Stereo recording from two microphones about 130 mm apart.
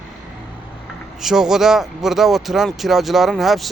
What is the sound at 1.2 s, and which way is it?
Speech, 5° right (ahead or behind).